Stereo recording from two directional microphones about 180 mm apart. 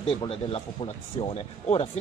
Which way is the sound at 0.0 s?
30° left (ahead or behind).